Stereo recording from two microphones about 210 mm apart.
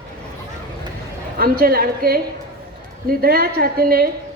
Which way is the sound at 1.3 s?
45° right (ahead or behind).